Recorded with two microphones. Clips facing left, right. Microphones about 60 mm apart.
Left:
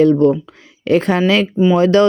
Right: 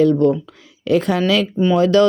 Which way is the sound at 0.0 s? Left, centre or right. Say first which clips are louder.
Left 3 dB; left.